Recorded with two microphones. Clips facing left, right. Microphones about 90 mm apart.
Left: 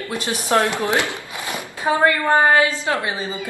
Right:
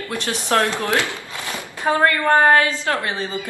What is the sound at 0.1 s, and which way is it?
A woman's voice, 15° left (ahead or behind).